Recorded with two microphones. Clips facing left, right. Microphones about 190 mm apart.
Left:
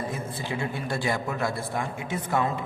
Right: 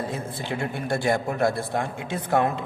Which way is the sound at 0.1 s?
60° right (ahead or behind).